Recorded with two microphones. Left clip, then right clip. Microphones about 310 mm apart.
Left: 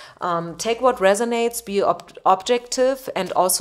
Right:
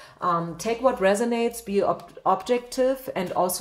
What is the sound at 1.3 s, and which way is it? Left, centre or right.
Speech, left.